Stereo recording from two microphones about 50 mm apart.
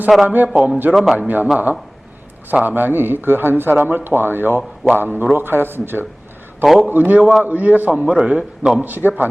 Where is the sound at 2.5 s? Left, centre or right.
Right.